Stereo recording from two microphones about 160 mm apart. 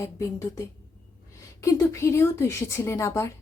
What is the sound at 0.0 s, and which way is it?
Speech, 20° left (ahead or behind).